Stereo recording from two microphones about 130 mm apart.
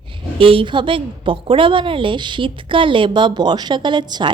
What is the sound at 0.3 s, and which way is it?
A woman's voice, 45° right (ahead or behind).